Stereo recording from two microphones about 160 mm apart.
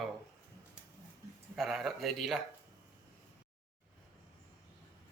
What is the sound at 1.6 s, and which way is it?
Speech, centre (ahead or behind).